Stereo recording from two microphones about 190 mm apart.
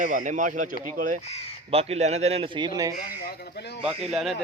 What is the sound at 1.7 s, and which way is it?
Speech, 30° right (ahead or behind).